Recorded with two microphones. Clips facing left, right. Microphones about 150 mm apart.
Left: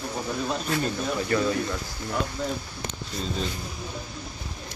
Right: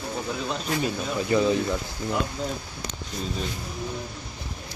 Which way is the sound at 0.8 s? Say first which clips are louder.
Even; 15° right (ahead or behind).